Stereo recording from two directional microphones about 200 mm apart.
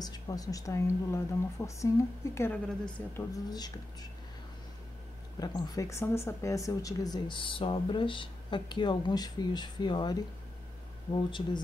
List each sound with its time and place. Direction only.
0.0 s a woman's voice: 20° left (ahead or behind)
3.4 s speech: 20° left (ahead or behind)
5.4 s speech: 20° left (ahead or behind)
11.1 s speech: 25° left (ahead or behind)